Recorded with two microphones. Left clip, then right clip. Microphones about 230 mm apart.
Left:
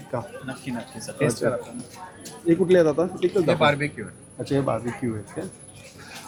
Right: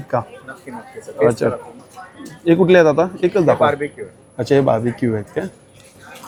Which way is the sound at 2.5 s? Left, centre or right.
Right.